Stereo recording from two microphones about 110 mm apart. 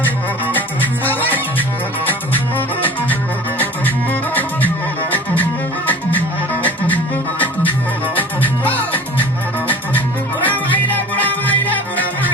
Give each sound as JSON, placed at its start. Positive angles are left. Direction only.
{"t": 2.6, "sound": "music", "side_deg": 15}
{"t": 10.4, "sound": "music", "side_deg": 15}